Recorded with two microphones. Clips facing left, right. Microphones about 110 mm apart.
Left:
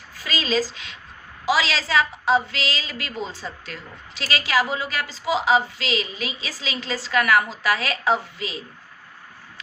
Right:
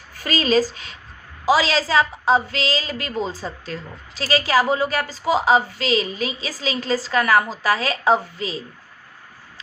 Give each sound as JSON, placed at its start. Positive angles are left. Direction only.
{"t": 0.1, "sound": "a woman's voice", "side_deg": -50}